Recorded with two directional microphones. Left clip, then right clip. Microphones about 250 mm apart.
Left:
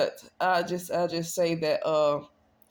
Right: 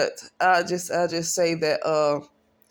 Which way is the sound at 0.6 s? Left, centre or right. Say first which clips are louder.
Right 4 dB; centre.